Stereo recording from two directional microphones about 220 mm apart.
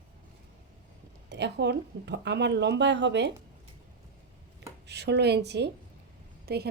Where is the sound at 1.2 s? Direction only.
50° right (ahead or behind).